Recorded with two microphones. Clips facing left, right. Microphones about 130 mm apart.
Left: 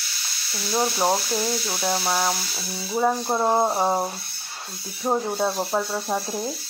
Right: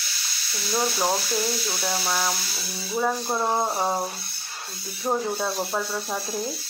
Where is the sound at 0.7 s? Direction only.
20° left (ahead or behind).